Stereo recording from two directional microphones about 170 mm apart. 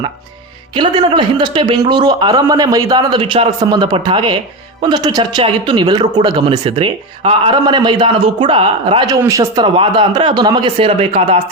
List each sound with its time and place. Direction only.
0.8 s speech: 30° right (ahead or behind)